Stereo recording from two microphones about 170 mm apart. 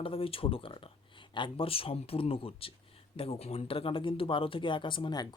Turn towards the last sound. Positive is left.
turn(degrees=25)  # may be behind; listen again after turning